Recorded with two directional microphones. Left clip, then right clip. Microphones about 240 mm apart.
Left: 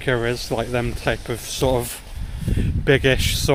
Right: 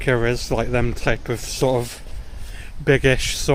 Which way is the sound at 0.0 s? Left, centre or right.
Centre.